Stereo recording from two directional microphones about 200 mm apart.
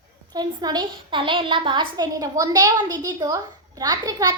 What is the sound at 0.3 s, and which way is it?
A woman's voice, 20° right (ahead or behind).